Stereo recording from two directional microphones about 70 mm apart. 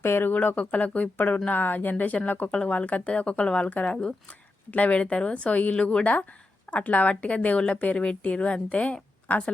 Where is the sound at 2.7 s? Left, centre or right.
Left.